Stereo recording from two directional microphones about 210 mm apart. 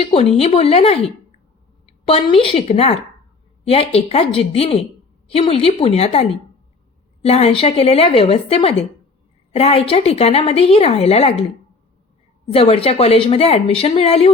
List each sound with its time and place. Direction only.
0.0 s a woman's voice: 30° left (ahead or behind)
12.5 s a woman's voice: 25° left (ahead or behind)